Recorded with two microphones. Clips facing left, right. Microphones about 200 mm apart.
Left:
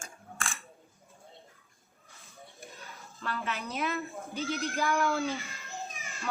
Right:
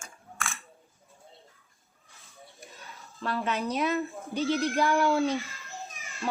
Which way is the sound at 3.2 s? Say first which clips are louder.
Right 6 dB; 35° right (ahead or behind).